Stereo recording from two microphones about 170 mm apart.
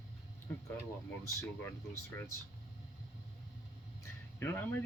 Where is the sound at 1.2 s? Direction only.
15° left (ahead or behind).